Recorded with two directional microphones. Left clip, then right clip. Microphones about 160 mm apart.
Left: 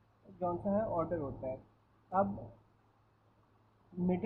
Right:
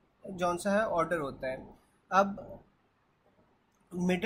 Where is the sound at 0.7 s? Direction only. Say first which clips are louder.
Right 5 dB; 35° right (ahead or behind).